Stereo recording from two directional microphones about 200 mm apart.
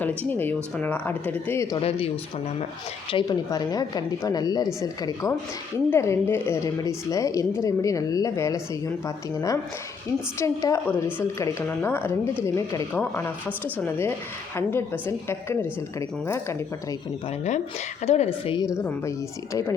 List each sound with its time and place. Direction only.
0.2 s a woman's voice: 10° left (ahead or behind)
3.1 s a woman's voice: 20° left (ahead or behind)
18.0 s a woman's voice: 30° left (ahead or behind)
18.8 s a woman's voice: 10° left (ahead or behind)